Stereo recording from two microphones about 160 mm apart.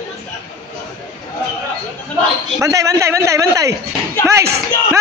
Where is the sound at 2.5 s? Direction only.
20° right (ahead or behind).